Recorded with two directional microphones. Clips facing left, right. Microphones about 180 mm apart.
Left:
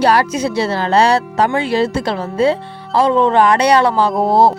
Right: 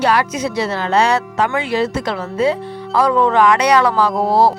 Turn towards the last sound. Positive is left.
turn(degrees=25)  # may be behind; listen again after turning